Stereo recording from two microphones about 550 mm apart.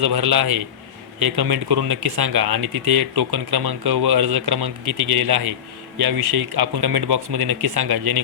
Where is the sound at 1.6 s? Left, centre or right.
Right.